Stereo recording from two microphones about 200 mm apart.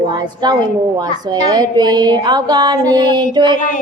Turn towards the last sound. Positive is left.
turn(degrees=-20)  # may be behind; listen again after turning